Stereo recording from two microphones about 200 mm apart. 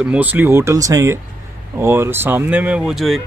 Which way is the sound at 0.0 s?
5° right (ahead or behind).